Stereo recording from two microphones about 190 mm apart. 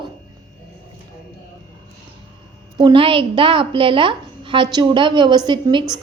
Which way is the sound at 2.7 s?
25° right (ahead or behind).